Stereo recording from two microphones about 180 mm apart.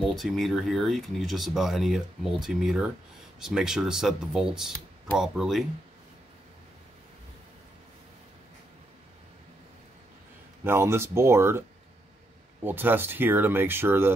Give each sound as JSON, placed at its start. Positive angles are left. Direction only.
{"t": 0.1, "sound": "speech", "side_deg": 0}
{"t": 10.6, "sound": "speech", "side_deg": -15}
{"t": 12.6, "sound": "speech", "side_deg": -10}